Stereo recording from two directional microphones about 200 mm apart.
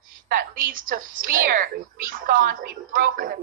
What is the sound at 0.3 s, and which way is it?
A woman's voice, 45° right (ahead or behind).